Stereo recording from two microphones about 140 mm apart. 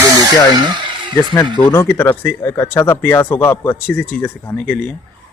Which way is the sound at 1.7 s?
15° left (ahead or behind).